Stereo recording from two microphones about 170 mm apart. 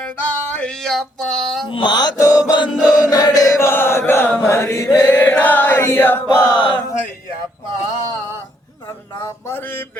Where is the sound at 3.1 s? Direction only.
25° left (ahead or behind).